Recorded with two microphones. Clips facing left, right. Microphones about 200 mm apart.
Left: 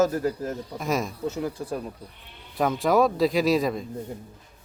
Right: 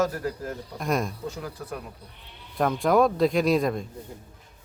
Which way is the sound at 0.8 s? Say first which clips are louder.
Right 1 dB; centre (ahead or behind).